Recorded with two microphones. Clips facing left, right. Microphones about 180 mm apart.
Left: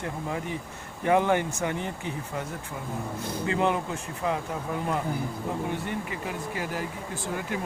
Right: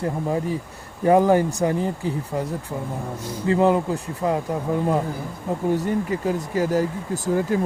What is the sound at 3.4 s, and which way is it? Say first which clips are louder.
Speech: right 8 dB; 35° right (ahead or behind).